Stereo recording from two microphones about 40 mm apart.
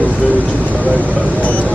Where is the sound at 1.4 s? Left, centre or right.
Left.